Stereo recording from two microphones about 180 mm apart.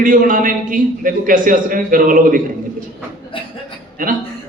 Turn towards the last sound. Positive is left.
turn(degrees=-50)  # may be behind; listen again after turning